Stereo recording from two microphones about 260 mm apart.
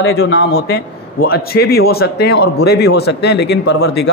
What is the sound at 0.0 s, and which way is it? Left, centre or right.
A man's voice, left.